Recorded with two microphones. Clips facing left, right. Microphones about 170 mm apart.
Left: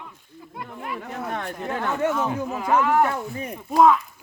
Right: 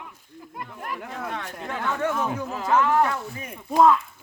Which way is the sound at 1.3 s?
40° left (ahead or behind).